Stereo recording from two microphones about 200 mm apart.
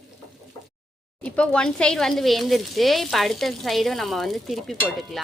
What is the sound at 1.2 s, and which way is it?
Speech, 5° left (ahead or behind).